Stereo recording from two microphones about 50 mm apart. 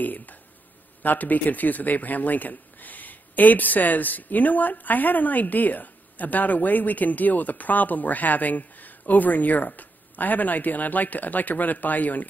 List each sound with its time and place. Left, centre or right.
0.0 s speech: left